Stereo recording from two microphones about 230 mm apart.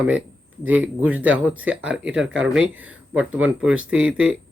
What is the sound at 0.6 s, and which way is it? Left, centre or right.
A man's voice, centre.